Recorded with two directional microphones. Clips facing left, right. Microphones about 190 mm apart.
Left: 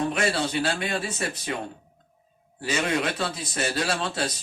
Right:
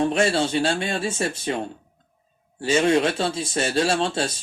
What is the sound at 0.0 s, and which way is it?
Speech, 30° right (ahead or behind).